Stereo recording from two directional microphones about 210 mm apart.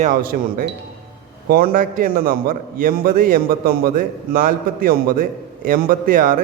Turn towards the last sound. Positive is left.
turn(degrees=-40)  # may be behind; listen again after turning